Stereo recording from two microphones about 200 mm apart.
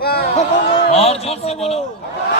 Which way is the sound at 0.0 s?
50° left (ahead or behind).